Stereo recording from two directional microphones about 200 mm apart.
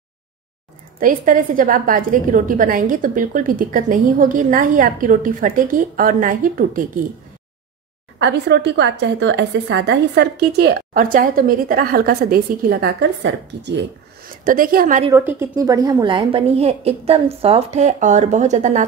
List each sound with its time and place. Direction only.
0.9 s a woman's voice: 45° right (ahead or behind)
8.2 s a woman's voice: 60° right (ahead or behind)
14.4 s speech: 45° right (ahead or behind)
15.0 s a woman's voice: 10° right (ahead or behind); by 18.9 s 35° right (ahead or behind)